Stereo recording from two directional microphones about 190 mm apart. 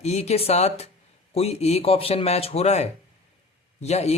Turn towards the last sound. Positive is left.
turn(degrees=35)  # may be behind; listen again after turning